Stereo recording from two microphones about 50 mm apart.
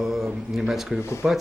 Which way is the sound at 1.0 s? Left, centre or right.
Left.